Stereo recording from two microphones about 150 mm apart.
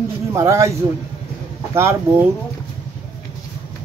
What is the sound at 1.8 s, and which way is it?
Speech, 15° right (ahead or behind).